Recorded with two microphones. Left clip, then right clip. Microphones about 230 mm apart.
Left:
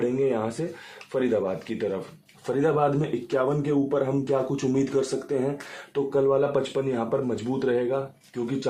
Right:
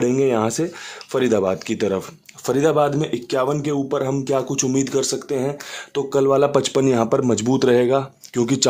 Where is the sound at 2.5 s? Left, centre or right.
Right.